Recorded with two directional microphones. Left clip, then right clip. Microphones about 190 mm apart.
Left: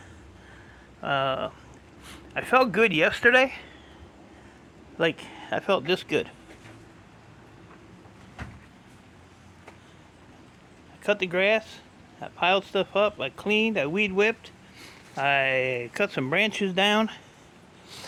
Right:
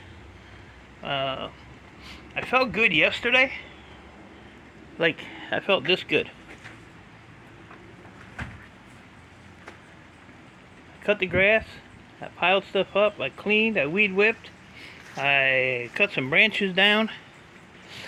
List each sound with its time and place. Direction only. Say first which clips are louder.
1.0 s speech: left 2 dB; 30° left (ahead or behind)
4.9 s speech: right 1 dB; 15° left (ahead or behind)
11.0 s speech: right 2 dB; 10° left (ahead or behind)